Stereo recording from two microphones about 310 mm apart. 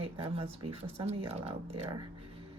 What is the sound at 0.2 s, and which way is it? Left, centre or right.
Speech, centre.